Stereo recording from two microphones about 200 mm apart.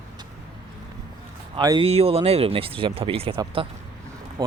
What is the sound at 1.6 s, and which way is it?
Speech, 20° right (ahead or behind).